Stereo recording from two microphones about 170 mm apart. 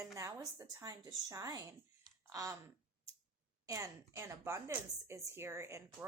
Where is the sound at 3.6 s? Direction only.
20° right (ahead or behind).